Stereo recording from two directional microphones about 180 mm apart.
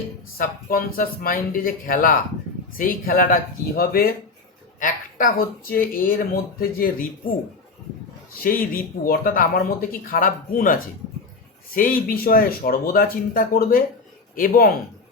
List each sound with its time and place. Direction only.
0.3 s speech: 55° left (ahead or behind)
8.4 s speech: 55° left (ahead or behind)